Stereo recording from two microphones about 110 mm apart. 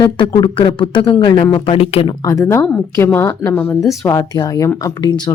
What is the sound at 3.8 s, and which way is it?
A woman's voice, 30° left (ahead or behind).